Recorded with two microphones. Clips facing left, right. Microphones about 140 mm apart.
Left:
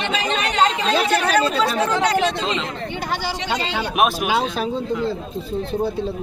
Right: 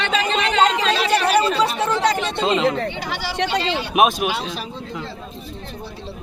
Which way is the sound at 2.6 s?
70° right (ahead or behind).